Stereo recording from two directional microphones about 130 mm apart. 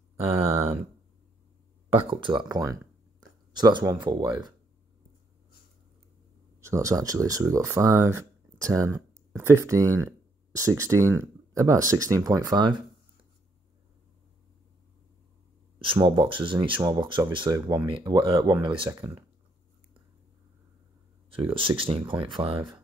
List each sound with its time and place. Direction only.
0.2 s speech: 50° right (ahead or behind)
1.9 s speech: 45° right (ahead or behind)
2.5 s speech: 30° right (ahead or behind)
6.6 s speech: 25° right (ahead or behind)
15.8 s speech: 40° right (ahead or behind)
21.3 s speech: 45° right (ahead or behind)